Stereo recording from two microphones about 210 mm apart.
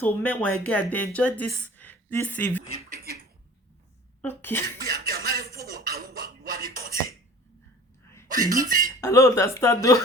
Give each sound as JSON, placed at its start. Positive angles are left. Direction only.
{"t": 0.0, "sound": "a woman's voice", "side_deg": 5}
{"t": 4.2, "sound": "speech", "side_deg": 10}
{"t": 4.8, "sound": "music", "side_deg": -45}
{"t": 8.5, "sound": "speech", "side_deg": -40}
{"t": 9.0, "sound": "speech", "side_deg": 15}